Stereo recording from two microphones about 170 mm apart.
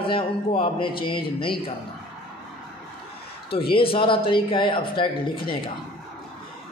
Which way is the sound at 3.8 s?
30° left (ahead or behind).